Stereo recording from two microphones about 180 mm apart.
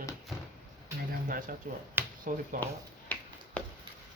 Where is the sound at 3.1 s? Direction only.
10° left (ahead or behind).